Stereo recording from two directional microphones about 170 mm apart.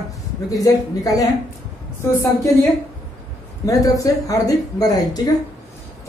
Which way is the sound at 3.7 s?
20° left (ahead or behind).